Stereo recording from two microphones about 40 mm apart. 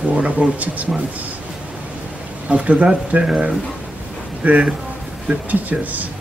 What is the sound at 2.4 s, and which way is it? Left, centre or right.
Speech, right.